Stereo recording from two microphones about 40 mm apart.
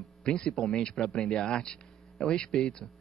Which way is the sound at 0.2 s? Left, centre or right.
Centre.